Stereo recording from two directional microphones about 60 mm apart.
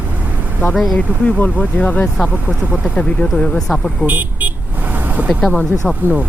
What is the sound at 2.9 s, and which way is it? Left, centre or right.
Speech, centre.